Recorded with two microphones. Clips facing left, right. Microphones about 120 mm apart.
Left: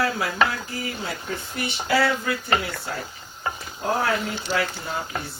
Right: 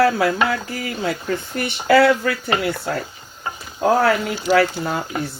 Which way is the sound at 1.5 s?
60° right (ahead or behind).